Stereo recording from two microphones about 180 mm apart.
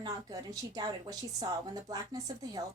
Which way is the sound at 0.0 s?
20° right (ahead or behind).